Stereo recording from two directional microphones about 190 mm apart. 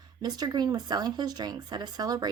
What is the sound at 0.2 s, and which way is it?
Speech, 20° right (ahead or behind).